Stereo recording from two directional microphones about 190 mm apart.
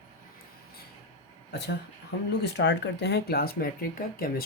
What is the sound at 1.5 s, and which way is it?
Speech, 60° left (ahead or behind).